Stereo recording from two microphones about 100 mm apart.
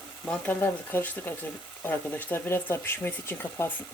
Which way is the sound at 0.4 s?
20° left (ahead or behind).